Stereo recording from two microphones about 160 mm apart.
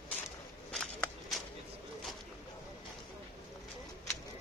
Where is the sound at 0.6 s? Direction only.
5° left (ahead or behind).